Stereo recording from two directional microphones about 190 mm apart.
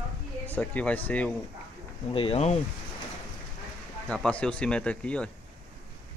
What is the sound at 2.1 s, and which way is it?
Speech, 30° left (ahead or behind).